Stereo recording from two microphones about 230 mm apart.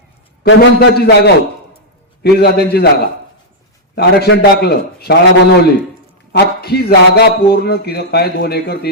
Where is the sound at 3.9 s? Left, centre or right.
Left.